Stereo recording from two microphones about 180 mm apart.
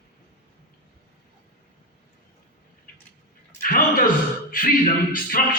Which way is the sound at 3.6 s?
50° left (ahead or behind).